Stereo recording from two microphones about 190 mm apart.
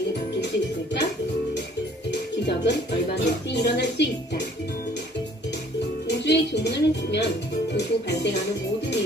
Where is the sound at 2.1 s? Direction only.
60° left (ahead or behind).